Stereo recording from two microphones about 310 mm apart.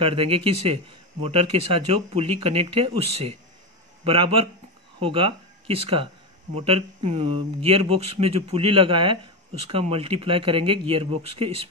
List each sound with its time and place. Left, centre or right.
0.0 s speech: centre